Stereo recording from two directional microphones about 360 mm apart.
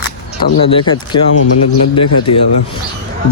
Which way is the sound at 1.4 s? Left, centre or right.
Left.